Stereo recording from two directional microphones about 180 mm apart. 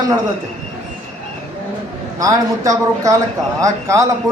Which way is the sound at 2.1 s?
20° right (ahead or behind).